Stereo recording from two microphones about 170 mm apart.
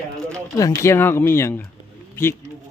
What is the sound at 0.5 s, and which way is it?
Speech, 20° left (ahead or behind).